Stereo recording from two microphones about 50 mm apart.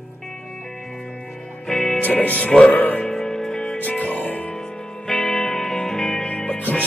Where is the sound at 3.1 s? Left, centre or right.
Centre.